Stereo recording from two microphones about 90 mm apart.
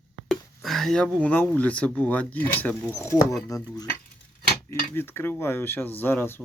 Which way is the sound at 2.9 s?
30° left (ahead or behind).